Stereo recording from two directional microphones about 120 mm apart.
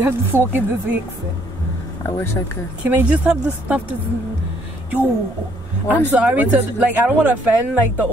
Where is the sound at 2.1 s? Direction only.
20° left (ahead or behind).